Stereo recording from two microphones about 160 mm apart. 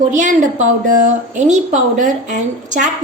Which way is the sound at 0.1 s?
50° right (ahead or behind).